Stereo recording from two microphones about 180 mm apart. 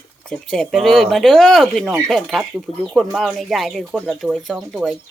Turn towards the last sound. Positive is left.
turn(degrees=0)  # may be behind; listen again after turning